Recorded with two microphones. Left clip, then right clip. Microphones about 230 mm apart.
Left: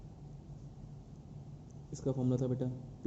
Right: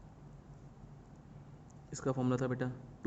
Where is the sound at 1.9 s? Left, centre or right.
Right.